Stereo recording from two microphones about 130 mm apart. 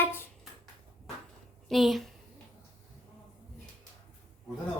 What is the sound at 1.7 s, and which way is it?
Speech, centre (ahead or behind).